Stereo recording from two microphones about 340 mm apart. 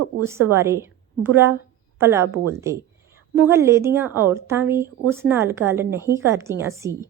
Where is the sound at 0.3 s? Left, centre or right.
Centre.